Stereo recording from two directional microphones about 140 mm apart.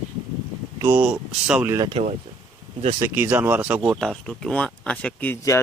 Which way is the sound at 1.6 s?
30° right (ahead or behind).